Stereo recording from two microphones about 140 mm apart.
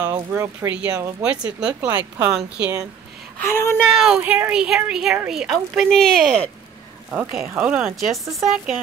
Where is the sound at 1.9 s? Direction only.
25° right (ahead or behind).